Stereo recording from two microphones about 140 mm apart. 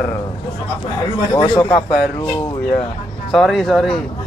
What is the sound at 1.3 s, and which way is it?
Speech, 30° left (ahead or behind).